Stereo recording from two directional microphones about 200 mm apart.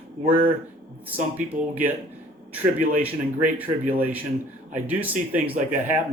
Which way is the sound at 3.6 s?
10° right (ahead or behind).